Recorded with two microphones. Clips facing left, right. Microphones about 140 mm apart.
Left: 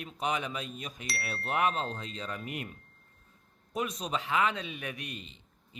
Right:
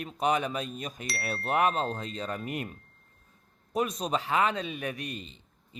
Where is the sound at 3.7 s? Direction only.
40° right (ahead or behind).